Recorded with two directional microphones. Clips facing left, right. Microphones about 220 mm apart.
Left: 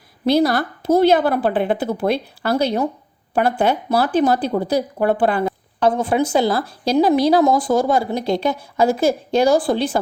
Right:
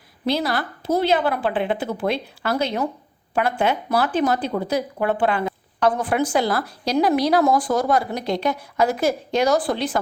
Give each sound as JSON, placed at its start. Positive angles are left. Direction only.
{"t": 0.3, "sound": "a woman's voice", "side_deg": 40}
{"t": 5.9, "sound": "speech", "side_deg": 25}